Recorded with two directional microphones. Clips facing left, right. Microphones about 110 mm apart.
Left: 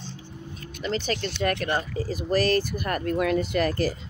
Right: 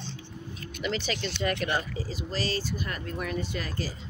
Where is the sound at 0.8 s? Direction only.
40° left (ahead or behind); by 3.7 s 65° left (ahead or behind).